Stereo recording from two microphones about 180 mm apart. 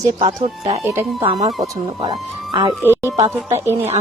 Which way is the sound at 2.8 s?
10° right (ahead or behind).